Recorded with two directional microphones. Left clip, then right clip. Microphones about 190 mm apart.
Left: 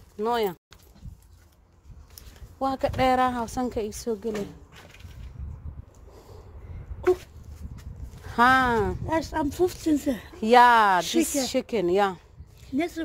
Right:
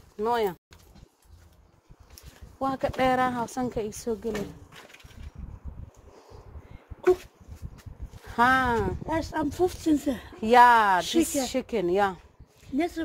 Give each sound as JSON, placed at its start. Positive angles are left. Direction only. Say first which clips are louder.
{"t": 0.2, "sound": "a woman's voice", "louder": "even", "side_deg": 25}
{"t": 2.6, "sound": "a woman's voice", "louder": "left 2 dB", "side_deg": 25}
{"t": 8.2, "sound": "speech", "louder": "left 3 dB", "side_deg": 35}
{"t": 9.0, "sound": "speech", "louder": "left 2 dB", "side_deg": 55}
{"t": 11.0, "sound": "speech", "louder": "left 1 dB", "side_deg": 45}
{"t": 11.4, "sound": "speech", "louder": "left 2 dB", "side_deg": 30}
{"t": 12.7, "sound": "speech", "louder": "even", "side_deg": 50}